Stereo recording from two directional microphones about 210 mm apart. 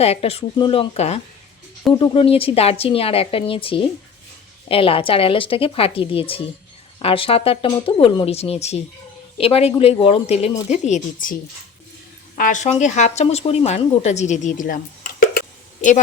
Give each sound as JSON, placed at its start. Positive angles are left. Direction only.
{"t": 0.0, "sound": "a woman's voice", "side_deg": 30}
{"t": 12.4, "sound": "speech", "side_deg": 35}